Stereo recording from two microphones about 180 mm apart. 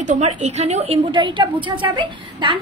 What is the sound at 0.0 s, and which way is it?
A woman's voice, 40° right (ahead or behind).